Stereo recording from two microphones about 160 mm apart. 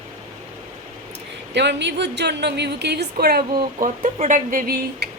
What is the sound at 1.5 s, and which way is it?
A woman's voice, 90° right.